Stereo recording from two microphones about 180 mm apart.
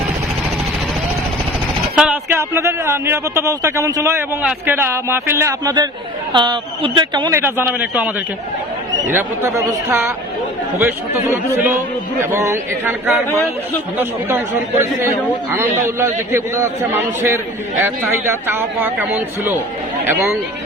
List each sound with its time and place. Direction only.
2.0 s a man's voice: 10° right (ahead or behind)